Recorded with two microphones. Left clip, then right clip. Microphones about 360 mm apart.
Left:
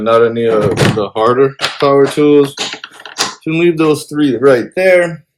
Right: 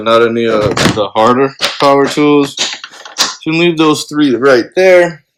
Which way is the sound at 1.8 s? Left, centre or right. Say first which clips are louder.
Even; right.